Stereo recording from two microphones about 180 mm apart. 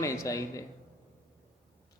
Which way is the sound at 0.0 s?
15° left (ahead or behind).